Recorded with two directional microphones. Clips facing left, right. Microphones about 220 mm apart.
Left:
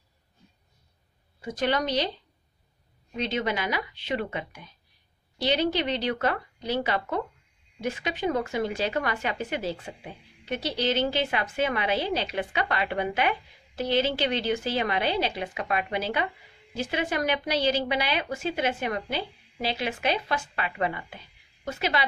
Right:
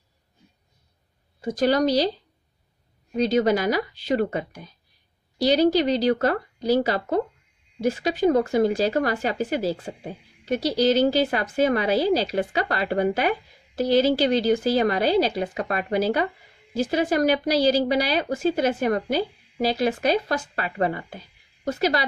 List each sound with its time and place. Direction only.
1.4 s speech: 40° right (ahead or behind)
3.2 s speech: 40° right (ahead or behind)